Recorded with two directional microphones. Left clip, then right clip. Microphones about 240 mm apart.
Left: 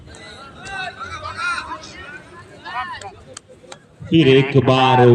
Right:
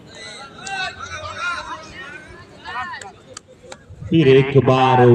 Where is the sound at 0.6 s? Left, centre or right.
Right.